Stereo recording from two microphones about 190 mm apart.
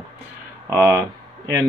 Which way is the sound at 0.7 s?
15° right (ahead or behind).